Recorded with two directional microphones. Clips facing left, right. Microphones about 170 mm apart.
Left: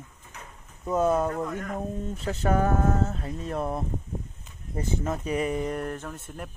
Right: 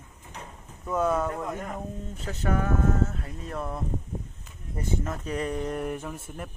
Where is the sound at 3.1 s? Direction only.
25° left (ahead or behind).